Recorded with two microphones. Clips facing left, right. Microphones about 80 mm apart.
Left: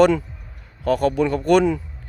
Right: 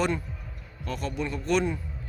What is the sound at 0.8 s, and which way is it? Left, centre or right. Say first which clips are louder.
Speech: left 13 dB; left.